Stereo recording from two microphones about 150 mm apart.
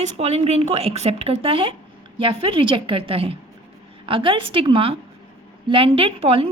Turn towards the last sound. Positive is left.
turn(degrees=-40)  # may be behind; listen again after turning